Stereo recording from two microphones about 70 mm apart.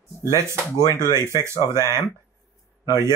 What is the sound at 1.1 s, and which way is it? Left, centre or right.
Speech, left.